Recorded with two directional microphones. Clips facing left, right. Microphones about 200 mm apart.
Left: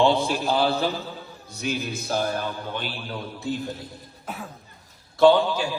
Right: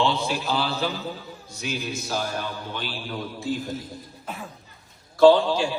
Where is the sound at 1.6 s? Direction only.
55° left (ahead or behind).